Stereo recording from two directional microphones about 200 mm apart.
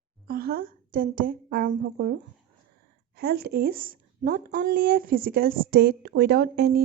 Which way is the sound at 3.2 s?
50° right (ahead or behind).